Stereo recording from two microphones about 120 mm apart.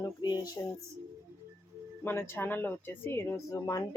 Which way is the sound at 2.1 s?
20° left (ahead or behind).